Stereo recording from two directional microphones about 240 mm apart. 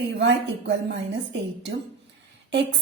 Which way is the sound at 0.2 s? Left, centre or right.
Right.